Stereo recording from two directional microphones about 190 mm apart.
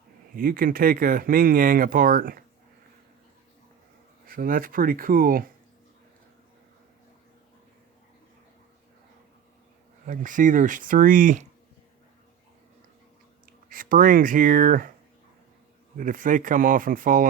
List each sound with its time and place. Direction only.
0.3 s speech: 50° right (ahead or behind)
4.3 s speech: 50° right (ahead or behind)
10.1 s speech: 45° right (ahead or behind)
13.4 s speech: 45° right (ahead or behind)
16.0 s speech: 45° right (ahead or behind)